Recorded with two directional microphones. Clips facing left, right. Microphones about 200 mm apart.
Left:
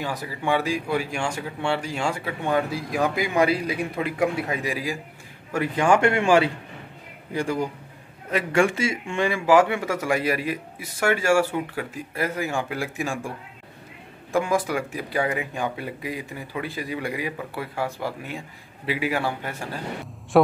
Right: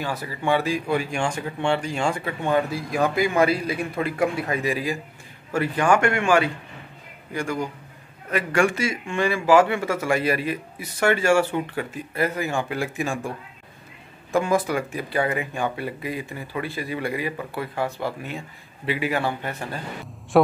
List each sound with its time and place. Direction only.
0.0 s speech: 15° left (ahead or behind)
5.9 s speech: 30° left (ahead or behind)
8.5 s speech: 25° left (ahead or behind); by 13.3 s 10° left (ahead or behind)
14.3 s speech: 10° left (ahead or behind)